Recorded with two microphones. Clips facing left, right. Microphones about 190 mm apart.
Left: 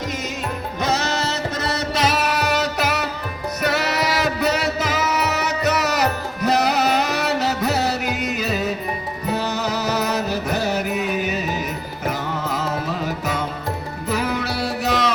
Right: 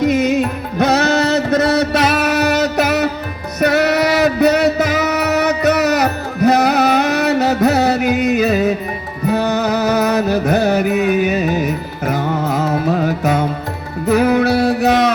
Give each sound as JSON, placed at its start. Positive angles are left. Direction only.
{"t": 0.0, "sound": "music", "side_deg": -60}